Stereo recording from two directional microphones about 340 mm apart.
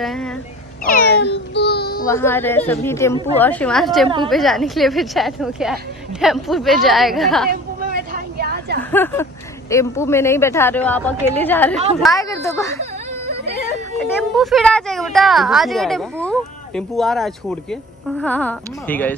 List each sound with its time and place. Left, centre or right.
0.0 s a woman's voice: centre
0.8 s meow: left
2.0 s a woman's voice: centre
7.8 s a sound: right
8.9 s speech: centre
13.9 s a woman's voice: centre